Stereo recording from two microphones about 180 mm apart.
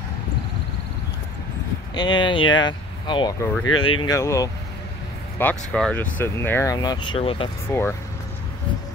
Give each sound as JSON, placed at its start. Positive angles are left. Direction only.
{"t": 2.0, "sound": "speech", "side_deg": 25}
{"t": 5.4, "sound": "speech", "side_deg": 10}
{"t": 7.7, "sound": "speech", "side_deg": 15}